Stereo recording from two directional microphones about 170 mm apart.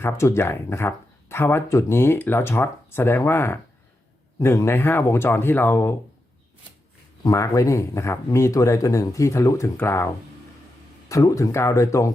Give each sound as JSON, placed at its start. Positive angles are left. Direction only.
{"t": 0.0, "sound": "speech", "side_deg": 15}
{"t": 7.3, "sound": "speech", "side_deg": 20}
{"t": 11.1, "sound": "speech", "side_deg": 20}